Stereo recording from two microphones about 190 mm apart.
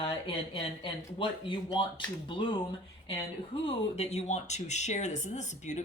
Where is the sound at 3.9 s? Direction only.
35° left (ahead or behind).